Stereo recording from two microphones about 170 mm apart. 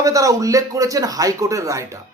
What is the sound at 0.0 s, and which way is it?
Speech, 20° right (ahead or behind).